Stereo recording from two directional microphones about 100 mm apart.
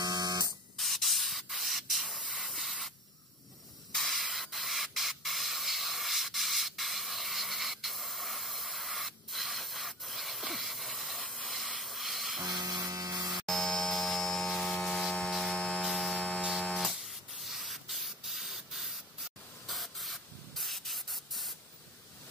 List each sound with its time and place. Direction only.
0.0 s a sound: 40° right (ahead or behind)
0.7 s spray: centre (ahead or behind)
3.9 s spray: centre (ahead or behind)
12.4 s electric toothbrush: 45° right (ahead or behind)
12.8 s electric shaver: 35° right (ahead or behind)
13.5 s a sound: 5° left (ahead or behind)
16.9 s spray: centre (ahead or behind)